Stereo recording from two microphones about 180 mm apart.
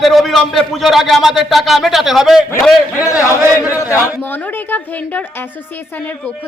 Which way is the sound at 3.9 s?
10° right (ahead or behind).